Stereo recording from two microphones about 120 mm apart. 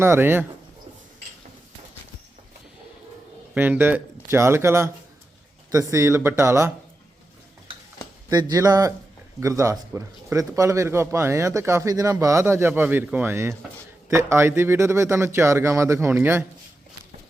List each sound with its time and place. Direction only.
0.0 s speech: 20° right (ahead or behind)
3.5 s speech: 15° right (ahead or behind)
8.3 s speech: 35° right (ahead or behind); by 16.4 s 20° right (ahead or behind)